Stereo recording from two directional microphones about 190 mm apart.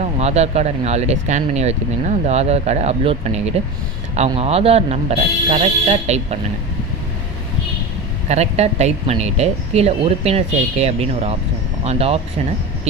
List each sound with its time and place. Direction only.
0.0 s speech: 35° right (ahead or behind)
8.3 s speech: 35° right (ahead or behind)